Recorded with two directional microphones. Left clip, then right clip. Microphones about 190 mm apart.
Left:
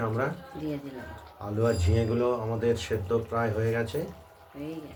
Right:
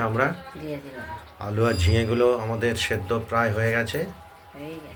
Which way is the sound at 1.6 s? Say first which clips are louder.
Right 4 dB; 25° right (ahead or behind).